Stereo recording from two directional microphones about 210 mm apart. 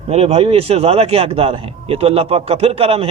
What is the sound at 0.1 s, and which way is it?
A man's voice, 30° right (ahead or behind).